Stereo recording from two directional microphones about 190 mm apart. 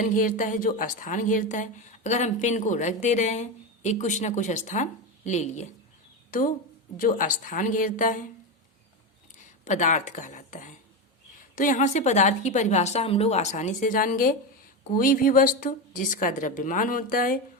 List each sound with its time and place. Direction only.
0.0 s speech: 45° left (ahead or behind)
6.9 s a woman's voice: 45° left (ahead or behind)
9.6 s a woman's voice: 40° left (ahead or behind)